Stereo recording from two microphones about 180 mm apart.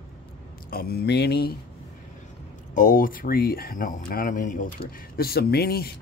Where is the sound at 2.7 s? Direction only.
45° left (ahead or behind).